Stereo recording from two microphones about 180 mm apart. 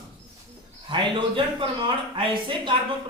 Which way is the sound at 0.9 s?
25° right (ahead or behind).